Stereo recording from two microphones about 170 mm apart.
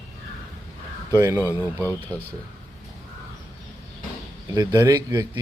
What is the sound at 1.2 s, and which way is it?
Speech, 15° right (ahead or behind).